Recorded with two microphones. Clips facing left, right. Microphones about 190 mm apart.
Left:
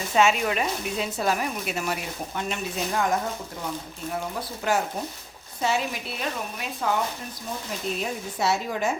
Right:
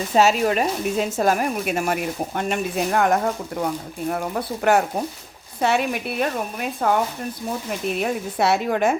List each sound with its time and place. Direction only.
0.1 s speech: 40° right (ahead or behind); by 9.0 s 60° right (ahead or behind)